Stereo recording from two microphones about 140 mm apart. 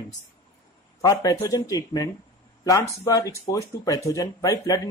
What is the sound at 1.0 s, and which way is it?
Speech, 25° left (ahead or behind).